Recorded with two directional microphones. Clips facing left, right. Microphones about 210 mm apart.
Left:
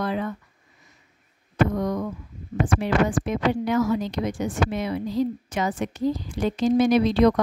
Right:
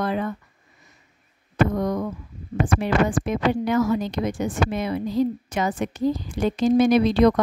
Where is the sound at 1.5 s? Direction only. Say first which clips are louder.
Right 1 dB; 50° right (ahead or behind).